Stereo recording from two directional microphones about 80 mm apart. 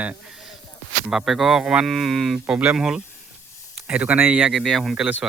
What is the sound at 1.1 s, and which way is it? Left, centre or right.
Speech, centre.